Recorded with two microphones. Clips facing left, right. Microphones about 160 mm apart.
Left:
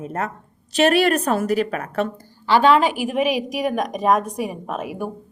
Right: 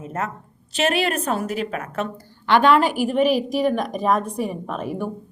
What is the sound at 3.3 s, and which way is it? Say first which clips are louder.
A woman's voice: right 2 dB; 35° right (ahead or behind).